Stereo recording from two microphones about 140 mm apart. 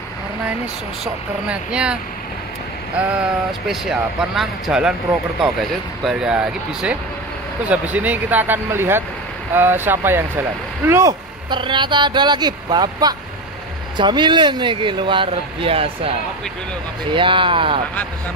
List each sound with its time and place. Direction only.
1.0 s speech: 5° right (ahead or behind)
3.0 s speech: 10° right (ahead or behind)
6.0 s speech: 5° right (ahead or behind); by 11.1 s 20° right (ahead or behind)
11.5 s speech: 35° right (ahead or behind)
17.1 s speech: 35° right (ahead or behind)